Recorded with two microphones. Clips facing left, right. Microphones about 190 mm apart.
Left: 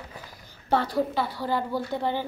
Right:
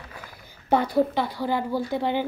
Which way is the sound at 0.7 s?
15° right (ahead or behind).